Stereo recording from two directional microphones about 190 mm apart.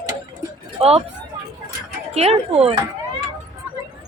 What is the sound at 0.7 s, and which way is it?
Speech, 30° right (ahead or behind).